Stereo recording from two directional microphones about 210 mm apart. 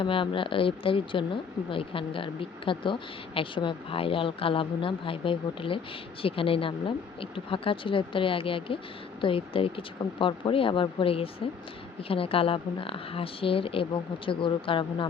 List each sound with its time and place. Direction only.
0.0 s speech: 25° left (ahead or behind)